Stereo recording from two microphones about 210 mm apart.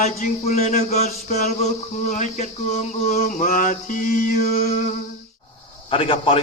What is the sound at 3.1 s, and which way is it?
Mantra, 35° left (ahead or behind).